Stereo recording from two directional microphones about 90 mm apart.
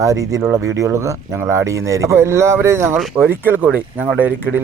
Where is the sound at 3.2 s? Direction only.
20° right (ahead or behind).